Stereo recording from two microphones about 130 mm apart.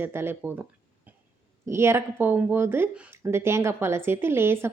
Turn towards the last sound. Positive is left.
turn(degrees=-20)  # may be behind; listen again after turning